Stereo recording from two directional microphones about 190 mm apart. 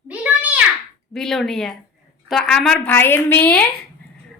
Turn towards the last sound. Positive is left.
turn(degrees=10)  # may be behind; listen again after turning